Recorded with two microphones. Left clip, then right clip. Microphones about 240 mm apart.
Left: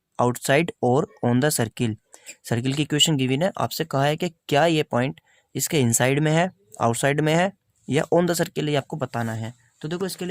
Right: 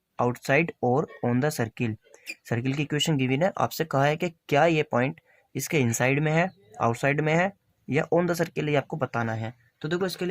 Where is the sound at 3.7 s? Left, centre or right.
Left.